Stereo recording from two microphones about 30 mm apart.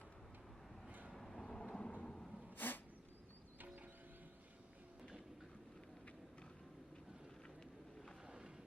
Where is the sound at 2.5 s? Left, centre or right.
Left.